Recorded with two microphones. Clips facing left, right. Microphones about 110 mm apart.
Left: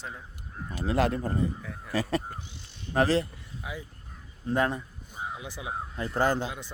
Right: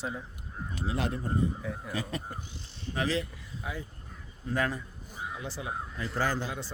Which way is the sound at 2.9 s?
40° left (ahead or behind).